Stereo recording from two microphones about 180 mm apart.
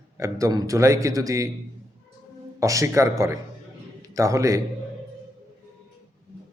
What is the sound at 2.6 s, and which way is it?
A man's voice, 15° right (ahead or behind).